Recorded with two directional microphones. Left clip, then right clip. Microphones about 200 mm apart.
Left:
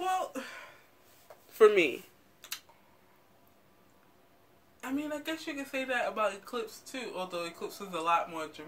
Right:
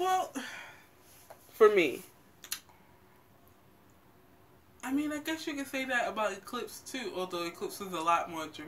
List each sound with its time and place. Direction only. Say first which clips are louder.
0.3 s a sound: even; 40° left (ahead or behind)
1.6 s speech: left 1 dB; 15° left (ahead or behind)
4.7 s speech: right 2 dB; 40° left (ahead or behind)